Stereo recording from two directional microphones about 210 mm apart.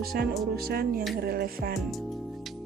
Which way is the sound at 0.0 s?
45° right (ahead or behind).